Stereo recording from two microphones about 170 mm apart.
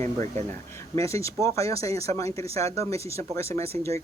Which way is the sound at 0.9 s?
15° left (ahead or behind).